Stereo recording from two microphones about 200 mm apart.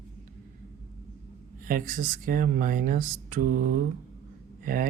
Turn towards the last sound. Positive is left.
turn(degrees=-45)  # may be behind; listen again after turning